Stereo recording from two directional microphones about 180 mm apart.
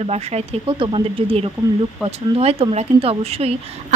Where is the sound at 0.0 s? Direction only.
35° right (ahead or behind).